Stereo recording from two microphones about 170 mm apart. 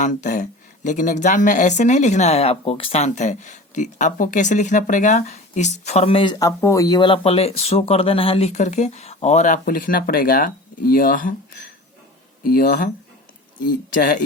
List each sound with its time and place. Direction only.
0.0 s speech: 45° left (ahead or behind)
6.4 s speech: 20° left (ahead or behind); by 11.3 s 55° left (ahead or behind)
12.4 s speech: 60° left (ahead or behind)